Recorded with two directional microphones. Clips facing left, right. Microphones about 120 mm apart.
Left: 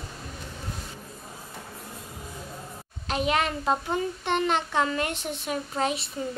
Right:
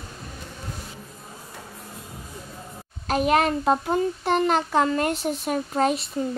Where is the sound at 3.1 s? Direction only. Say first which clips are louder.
Right 5 dB; 45° right (ahead or behind).